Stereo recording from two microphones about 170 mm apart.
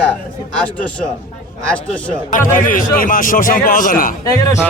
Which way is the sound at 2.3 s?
50° left (ahead or behind).